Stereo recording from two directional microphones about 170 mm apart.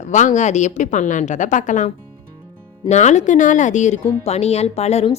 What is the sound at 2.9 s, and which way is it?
A woman's voice, 45° left (ahead or behind).